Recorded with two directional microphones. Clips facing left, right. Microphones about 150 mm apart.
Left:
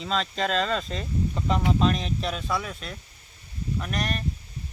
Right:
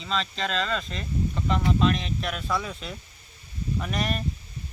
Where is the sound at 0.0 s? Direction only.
40° left (ahead or behind).